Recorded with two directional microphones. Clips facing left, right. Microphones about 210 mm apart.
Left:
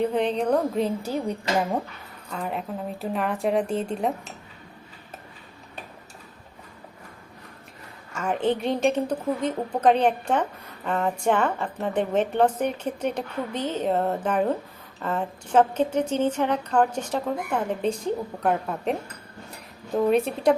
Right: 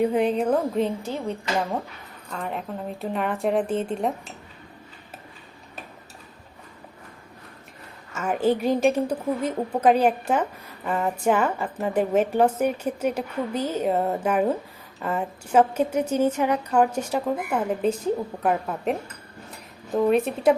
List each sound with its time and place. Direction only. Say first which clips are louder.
0.0 s a woman's voice: right 2 dB; 10° right (ahead or behind)
2.3 s a woman's voice: left 1 dB; centre (ahead or behind)
8.1 s a woman's voice: right 2 dB; 5° right (ahead or behind)